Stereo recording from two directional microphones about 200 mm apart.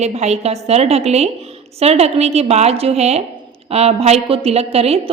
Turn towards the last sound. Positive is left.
turn(degrees=-30)  # may be behind; listen again after turning